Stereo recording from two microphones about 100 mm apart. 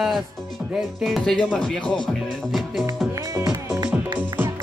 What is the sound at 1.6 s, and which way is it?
Speech, 10° left (ahead or behind).